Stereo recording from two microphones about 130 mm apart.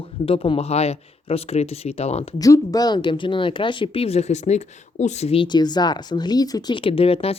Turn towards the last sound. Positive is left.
turn(degrees=50)  # may be behind; listen again after turning